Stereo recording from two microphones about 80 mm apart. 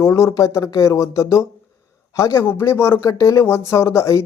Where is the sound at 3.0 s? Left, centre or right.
Left.